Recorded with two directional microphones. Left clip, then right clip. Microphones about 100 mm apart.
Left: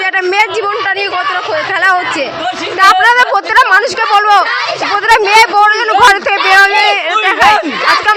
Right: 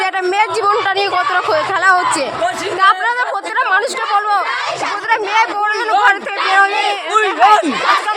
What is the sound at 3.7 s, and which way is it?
Speech, 30° left (ahead or behind).